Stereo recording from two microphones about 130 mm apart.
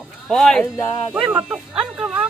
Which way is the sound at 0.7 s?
20° left (ahead or behind).